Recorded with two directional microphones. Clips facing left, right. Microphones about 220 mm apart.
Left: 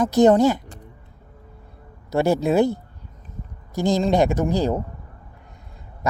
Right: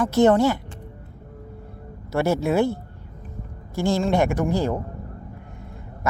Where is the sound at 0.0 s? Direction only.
15° left (ahead or behind).